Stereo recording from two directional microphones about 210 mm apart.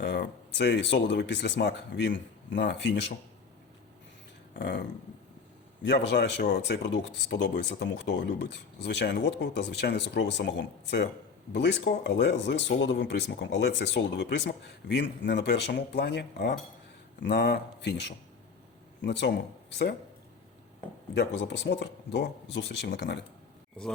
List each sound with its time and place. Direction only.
0.0 s speech: 55° left (ahead or behind)
4.5 s speech: 55° left (ahead or behind)
21.2 s speech: 55° left (ahead or behind)